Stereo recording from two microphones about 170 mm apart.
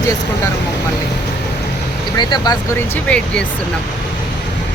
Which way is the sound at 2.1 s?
25° left (ahead or behind).